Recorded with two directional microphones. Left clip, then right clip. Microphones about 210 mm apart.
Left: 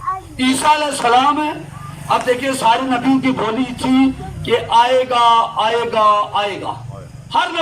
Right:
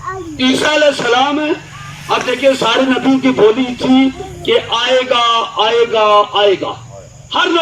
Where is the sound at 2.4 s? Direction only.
45° right (ahead or behind).